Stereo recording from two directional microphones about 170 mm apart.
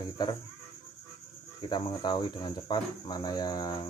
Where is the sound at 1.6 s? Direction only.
25° left (ahead or behind).